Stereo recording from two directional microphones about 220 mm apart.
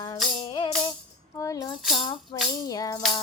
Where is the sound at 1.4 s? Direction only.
15° left (ahead or behind).